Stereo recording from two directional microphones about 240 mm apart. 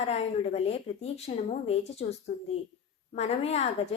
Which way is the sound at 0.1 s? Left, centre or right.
Left.